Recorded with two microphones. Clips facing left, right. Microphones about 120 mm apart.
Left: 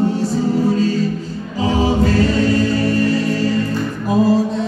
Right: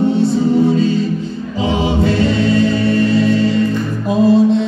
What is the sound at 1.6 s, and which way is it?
Choir, 35° left (ahead or behind).